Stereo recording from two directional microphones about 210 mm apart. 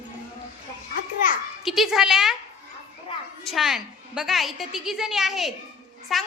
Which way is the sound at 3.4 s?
Centre (ahead or behind).